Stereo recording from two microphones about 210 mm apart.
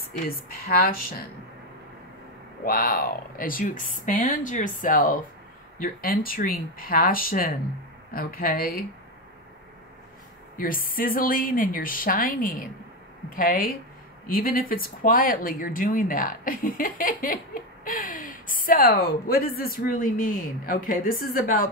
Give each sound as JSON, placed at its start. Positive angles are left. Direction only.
{"t": 0.3, "sound": "a woman's voice", "side_deg": 45}
{"t": 2.6, "sound": "a woman's voice", "side_deg": 45}
{"t": 10.6, "sound": "a woman's voice", "side_deg": 40}